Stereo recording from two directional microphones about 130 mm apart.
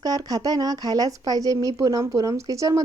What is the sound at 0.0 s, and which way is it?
A woman's voice, 30° right (ahead or behind).